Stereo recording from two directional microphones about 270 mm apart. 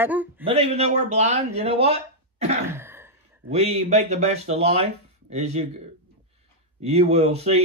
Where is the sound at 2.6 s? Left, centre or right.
Centre.